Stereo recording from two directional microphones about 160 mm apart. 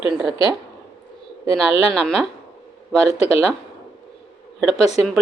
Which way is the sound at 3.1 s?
40° left (ahead or behind).